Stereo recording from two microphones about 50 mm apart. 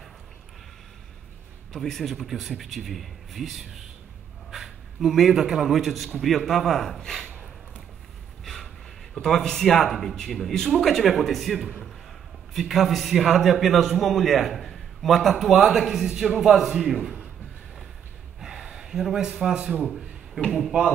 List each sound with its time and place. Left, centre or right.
1.7 s a man's voice: centre
9.1 s a man's voice: centre
18.4 s gasp: centre
19.3 s a man's voice: centre